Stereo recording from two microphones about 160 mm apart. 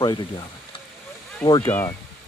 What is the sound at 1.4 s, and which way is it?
Speech, 25° left (ahead or behind).